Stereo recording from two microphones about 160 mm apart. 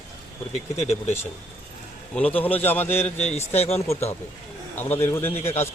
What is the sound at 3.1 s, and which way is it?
Speech, 45° left (ahead or behind).